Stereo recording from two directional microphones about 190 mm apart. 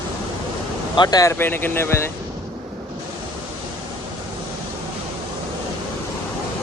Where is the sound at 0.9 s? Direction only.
20° left (ahead or behind).